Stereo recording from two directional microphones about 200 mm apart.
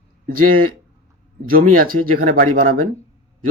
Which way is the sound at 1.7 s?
45° right (ahead or behind).